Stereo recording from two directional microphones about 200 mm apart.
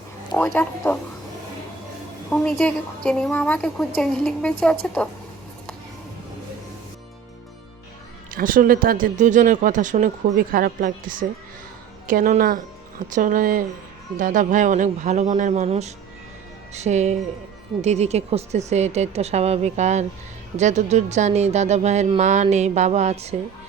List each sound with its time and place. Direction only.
0.3 s speech: 10° left (ahead or behind)
2.3 s a woman's voice: 5° left (ahead or behind)
8.3 s speech: 45° right (ahead or behind)